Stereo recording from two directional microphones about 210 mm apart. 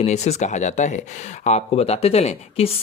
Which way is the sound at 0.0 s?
30° left (ahead or behind).